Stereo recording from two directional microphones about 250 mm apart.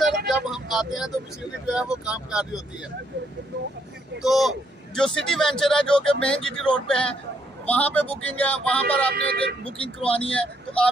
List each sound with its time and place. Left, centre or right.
0.3 s speech: centre
4.2 s speech: centre
9.1 s speech: right
9.7 s speech: left
10.3 s speech: centre